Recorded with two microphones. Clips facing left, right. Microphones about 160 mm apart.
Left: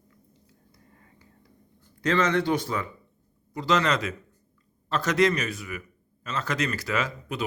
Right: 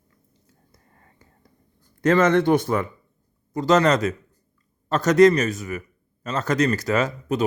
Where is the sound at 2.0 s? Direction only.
50° right (ahead or behind).